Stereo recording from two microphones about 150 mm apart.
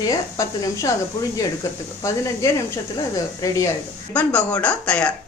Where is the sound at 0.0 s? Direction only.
25° left (ahead or behind).